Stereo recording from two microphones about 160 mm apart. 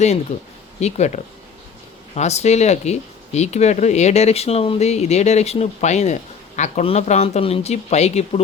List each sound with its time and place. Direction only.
0.3 s speech: 45° left (ahead or behind)